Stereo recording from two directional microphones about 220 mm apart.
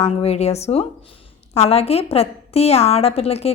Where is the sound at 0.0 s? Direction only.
30° left (ahead or behind).